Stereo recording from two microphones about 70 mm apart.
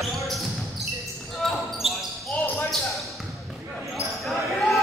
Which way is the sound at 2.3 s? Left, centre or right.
Left.